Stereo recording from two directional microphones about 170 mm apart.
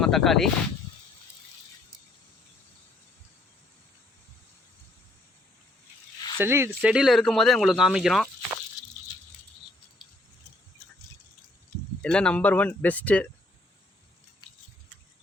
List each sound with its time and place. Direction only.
0.0 s speech: centre (ahead or behind)
6.4 s speech: 15° right (ahead or behind)
12.0 s speech: 5° left (ahead or behind)